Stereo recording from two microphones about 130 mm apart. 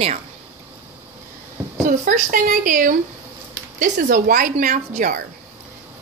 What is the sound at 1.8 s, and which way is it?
A woman's voice, 85° right.